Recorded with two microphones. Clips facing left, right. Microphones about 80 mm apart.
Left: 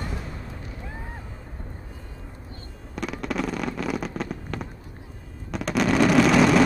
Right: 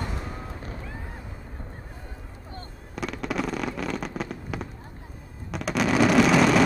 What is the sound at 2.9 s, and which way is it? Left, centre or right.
Fireworks, centre.